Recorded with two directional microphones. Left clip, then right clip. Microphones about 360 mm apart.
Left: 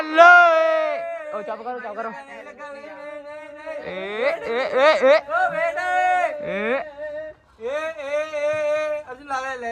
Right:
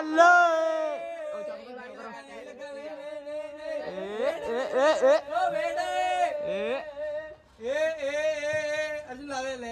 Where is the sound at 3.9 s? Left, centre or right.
Centre.